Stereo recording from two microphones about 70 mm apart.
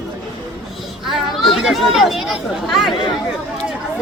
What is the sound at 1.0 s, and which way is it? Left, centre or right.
Speech, centre.